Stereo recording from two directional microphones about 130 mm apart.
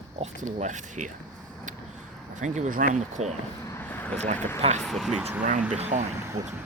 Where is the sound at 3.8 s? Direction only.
15° left (ahead or behind).